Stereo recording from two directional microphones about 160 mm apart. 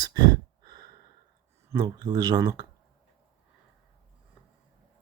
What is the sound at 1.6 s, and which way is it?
Speech, 25° right (ahead or behind).